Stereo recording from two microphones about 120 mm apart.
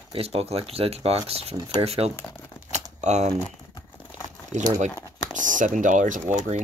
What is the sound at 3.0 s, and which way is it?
Speech, 75° right (ahead or behind).